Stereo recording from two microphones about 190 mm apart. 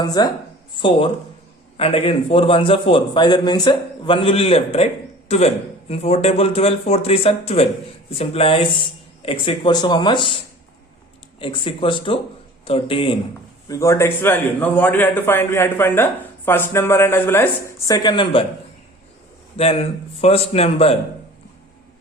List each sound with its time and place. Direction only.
0.0 s a man's voice: 20° left (ahead or behind)
13.7 s a man's voice: 15° left (ahead or behind)
19.5 s speech: 30° left (ahead or behind)